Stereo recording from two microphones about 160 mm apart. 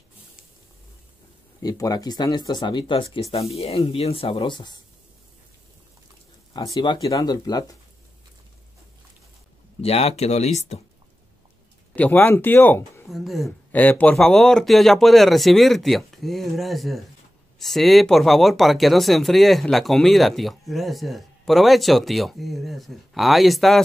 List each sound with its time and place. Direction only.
1.6 s speech: 25° left (ahead or behind)
6.5 s speech: 25° left (ahead or behind)
9.8 s speech: 40° left (ahead or behind)
11.9 s speech: 10° left (ahead or behind)
13.1 s speech: centre (ahead or behind)
13.7 s speech: 10° left (ahead or behind)